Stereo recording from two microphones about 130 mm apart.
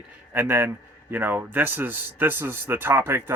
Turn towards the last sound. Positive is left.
turn(degrees=-15)  # may be behind; listen again after turning